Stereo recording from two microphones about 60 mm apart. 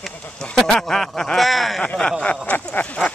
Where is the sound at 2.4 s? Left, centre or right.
Left.